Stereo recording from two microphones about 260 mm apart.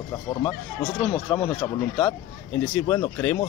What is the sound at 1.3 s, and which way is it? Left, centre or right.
Speech, centre.